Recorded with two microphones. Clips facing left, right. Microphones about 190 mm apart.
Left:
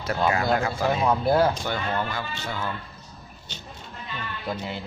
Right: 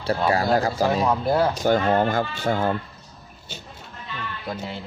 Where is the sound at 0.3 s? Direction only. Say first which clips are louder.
Right 4 dB; 35° right (ahead or behind).